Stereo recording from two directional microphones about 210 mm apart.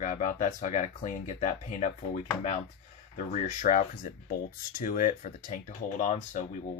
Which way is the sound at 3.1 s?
35° left (ahead or behind).